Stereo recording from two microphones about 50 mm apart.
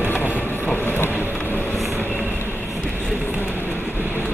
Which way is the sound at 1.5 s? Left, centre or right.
Left.